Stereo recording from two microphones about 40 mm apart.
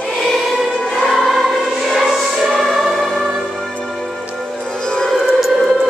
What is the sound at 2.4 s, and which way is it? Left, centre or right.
Music, centre.